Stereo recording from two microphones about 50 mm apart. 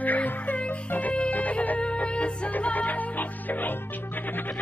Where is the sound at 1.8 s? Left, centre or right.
Left.